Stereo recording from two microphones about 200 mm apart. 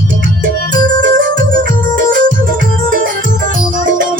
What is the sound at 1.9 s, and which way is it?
Music, 40° right (ahead or behind).